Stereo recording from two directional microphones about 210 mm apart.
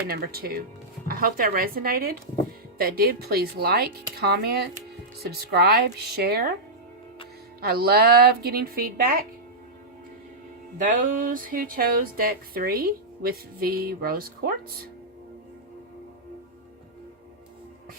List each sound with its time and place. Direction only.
0.1 s speech: 45° right (ahead or behind)
7.6 s speech: 45° right (ahead or behind)
10.8 s speech: 40° right (ahead or behind)